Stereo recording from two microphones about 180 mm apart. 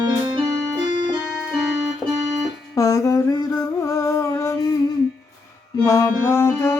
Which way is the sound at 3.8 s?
15° left (ahead or behind).